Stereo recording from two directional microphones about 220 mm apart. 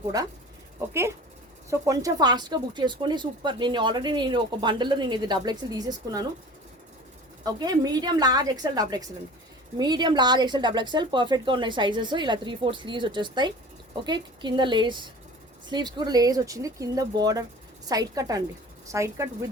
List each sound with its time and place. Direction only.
1.7 s speech: 15° right (ahead or behind)
7.4 s speech: 20° right (ahead or behind)